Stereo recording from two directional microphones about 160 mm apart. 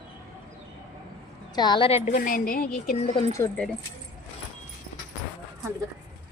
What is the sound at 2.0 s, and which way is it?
Speech, 60° left (ahead or behind).